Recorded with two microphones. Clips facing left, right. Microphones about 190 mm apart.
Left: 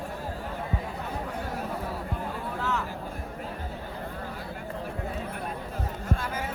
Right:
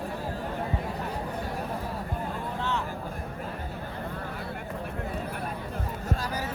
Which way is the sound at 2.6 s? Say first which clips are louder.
Left 1 dB; 30° right (ahead or behind).